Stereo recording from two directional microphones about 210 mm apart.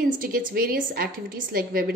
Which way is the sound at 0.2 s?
45° right (ahead or behind).